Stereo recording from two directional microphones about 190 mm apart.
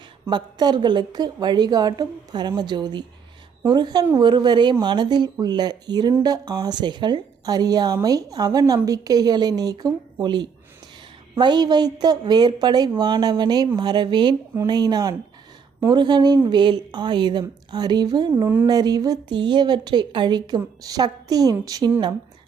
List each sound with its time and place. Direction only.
0.3 s speech: 25° right (ahead or behind)